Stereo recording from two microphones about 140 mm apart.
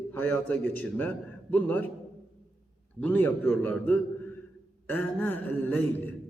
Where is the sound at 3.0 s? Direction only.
15° left (ahead or behind).